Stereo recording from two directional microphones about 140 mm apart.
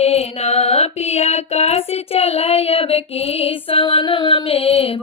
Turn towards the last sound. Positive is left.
turn(degrees=45)  # may be behind; listen again after turning